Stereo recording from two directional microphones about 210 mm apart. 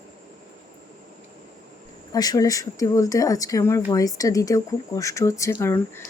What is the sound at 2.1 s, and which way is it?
Speech, 15° left (ahead or behind).